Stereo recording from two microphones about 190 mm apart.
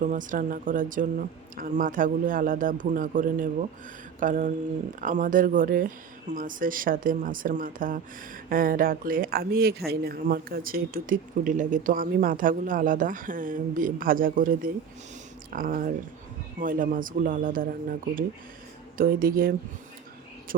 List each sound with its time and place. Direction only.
0.0 s speech: 45° right (ahead or behind)